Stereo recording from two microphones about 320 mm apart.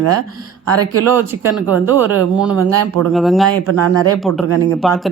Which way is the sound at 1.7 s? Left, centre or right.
Centre.